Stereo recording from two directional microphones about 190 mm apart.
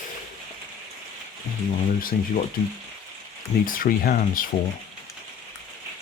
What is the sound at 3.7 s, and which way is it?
Speech, 50° left (ahead or behind).